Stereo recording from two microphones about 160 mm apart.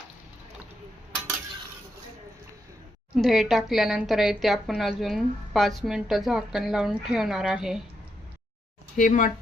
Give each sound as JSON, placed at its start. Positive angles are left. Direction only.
{"t": 3.2, "sound": "a woman's voice", "side_deg": 0}
{"t": 9.0, "sound": "speech", "side_deg": 55}